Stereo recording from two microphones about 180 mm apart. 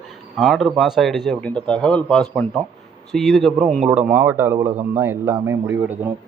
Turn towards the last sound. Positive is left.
turn(degrees=-10)  # may be behind; listen again after turning